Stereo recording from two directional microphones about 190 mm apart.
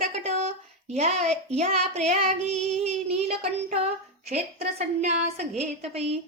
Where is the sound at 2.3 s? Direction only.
5° left (ahead or behind).